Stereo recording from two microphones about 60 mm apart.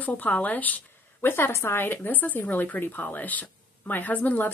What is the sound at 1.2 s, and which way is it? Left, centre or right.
Speech, left.